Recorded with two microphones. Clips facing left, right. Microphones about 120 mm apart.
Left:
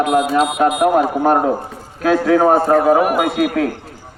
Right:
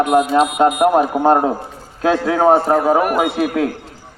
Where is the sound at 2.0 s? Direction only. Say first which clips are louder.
Left 1 dB; 20° right (ahead or behind).